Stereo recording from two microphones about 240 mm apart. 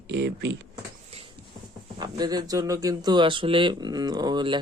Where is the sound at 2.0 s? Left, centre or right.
Centre.